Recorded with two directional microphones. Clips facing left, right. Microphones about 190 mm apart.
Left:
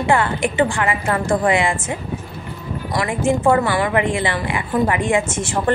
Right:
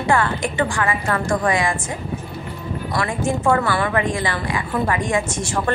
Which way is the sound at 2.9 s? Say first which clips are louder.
Left 4 dB; 20° left (ahead or behind).